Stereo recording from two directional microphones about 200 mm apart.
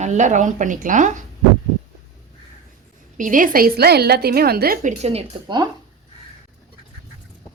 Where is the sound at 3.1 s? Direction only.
40° right (ahead or behind); by 5.7 s 20° right (ahead or behind).